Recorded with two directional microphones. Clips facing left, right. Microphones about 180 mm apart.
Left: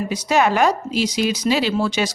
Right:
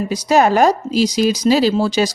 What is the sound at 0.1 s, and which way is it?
Speech, 40° right (ahead or behind).